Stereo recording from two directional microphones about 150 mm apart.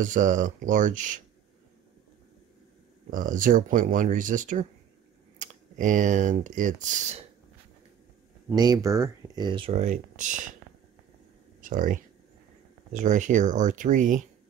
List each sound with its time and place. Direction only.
0.0 s speech: 60° right (ahead or behind)
3.1 s speech: 60° right (ahead or behind)
8.5 s speech: 25° right (ahead or behind)
9.8 s speech: 60° right (ahead or behind)
11.6 s speech: 60° right (ahead or behind)